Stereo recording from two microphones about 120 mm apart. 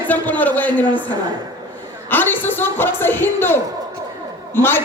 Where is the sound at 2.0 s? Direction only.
15° left (ahead or behind).